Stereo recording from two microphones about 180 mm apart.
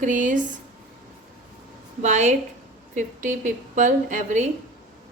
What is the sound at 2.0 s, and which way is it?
A woman's voice, 40° right (ahead or behind).